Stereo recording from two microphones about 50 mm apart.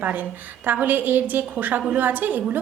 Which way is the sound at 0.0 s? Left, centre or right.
Right.